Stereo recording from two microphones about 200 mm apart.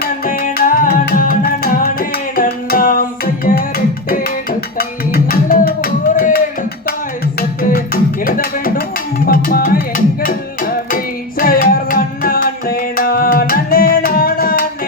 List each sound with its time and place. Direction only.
0.0 s music: 45° left (ahead or behind)
8.2 s music: 45° left (ahead or behind)